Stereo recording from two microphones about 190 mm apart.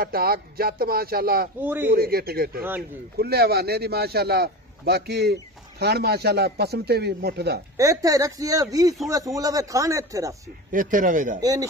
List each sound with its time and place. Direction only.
0.0 s speech: 50° right (ahead or behind)
1.6 s speech: 10° right (ahead or behind)
2.0 s a man's voice: 50° right (ahead or behind)
7.7 s speech: 15° right (ahead or behind)
10.7 s speech: 45° right (ahead or behind)